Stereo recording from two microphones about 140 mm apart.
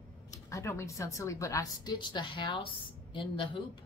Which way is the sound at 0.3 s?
20° left (ahead or behind).